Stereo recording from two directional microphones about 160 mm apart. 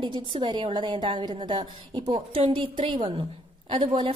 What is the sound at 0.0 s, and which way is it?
A woman's voice, 30° right (ahead or behind).